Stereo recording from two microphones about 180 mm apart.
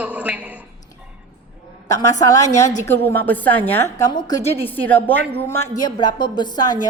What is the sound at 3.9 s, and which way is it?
Speech, 20° left (ahead or behind).